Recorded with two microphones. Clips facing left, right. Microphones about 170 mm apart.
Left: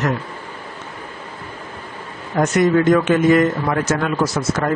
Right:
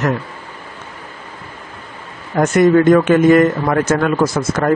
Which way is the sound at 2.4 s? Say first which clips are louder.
Right 4 dB; 55° right (ahead or behind).